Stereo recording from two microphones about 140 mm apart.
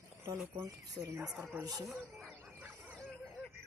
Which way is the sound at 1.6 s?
25° right (ahead or behind).